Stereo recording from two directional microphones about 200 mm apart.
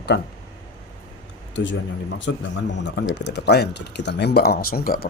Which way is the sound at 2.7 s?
60° left (ahead or behind).